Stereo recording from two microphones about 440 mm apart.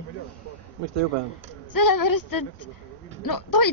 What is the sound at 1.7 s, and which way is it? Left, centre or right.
A woman's voice, left.